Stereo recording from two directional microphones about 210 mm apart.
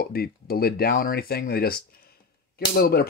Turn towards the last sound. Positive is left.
turn(degrees=45)  # may be behind; listen again after turning